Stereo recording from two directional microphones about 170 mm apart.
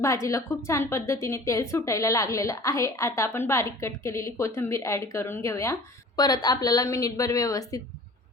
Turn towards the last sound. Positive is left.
turn(degrees=20)  # may be behind; listen again after turning